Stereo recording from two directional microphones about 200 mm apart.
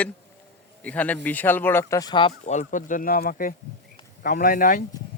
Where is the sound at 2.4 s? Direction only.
35° left (ahead or behind).